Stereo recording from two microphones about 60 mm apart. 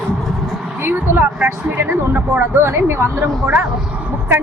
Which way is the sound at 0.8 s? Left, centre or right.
Right.